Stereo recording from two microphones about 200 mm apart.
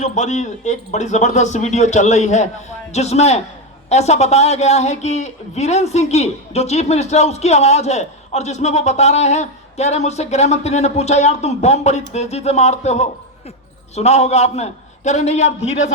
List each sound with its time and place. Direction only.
0.0 s speech: 35° left (ahead or behind)